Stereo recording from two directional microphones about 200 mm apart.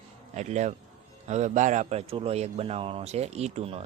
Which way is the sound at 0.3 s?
35° right (ahead or behind).